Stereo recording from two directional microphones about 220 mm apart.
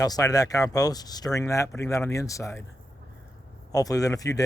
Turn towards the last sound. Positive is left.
turn(degrees=15)  # may be behind; listen again after turning